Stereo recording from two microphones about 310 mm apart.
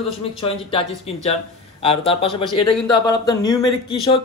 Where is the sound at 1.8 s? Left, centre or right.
Centre.